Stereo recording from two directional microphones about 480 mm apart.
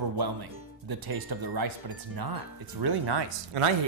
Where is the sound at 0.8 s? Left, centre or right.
Right.